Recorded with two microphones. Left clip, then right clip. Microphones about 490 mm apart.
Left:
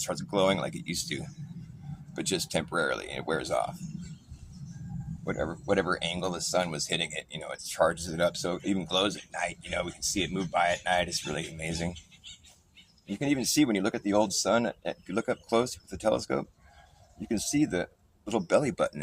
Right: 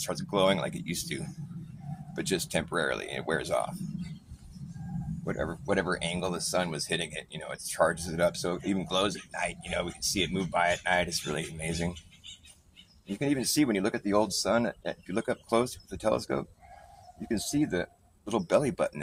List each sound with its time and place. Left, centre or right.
0.0 s speech: right
5.2 s speech: right